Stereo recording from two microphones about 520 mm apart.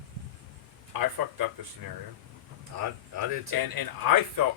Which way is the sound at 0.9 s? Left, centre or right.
Right.